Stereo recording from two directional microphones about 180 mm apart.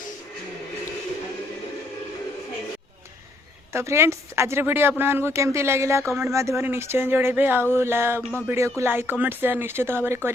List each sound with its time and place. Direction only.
3.7 s speech: 15° right (ahead or behind)
8.2 s a sound: 10° left (ahead or behind)
8.4 s speech: 15° right (ahead or behind)